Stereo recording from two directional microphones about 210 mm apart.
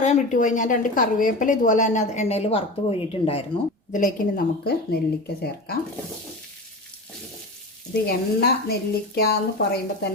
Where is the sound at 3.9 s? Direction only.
40° left (ahead or behind).